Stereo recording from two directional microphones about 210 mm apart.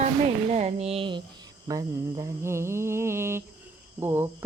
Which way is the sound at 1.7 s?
15° right (ahead or behind).